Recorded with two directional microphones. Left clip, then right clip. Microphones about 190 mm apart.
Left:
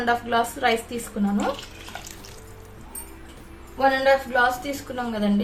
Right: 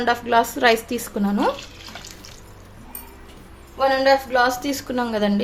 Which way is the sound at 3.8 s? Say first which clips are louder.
Right 2 dB; 40° right (ahead or behind).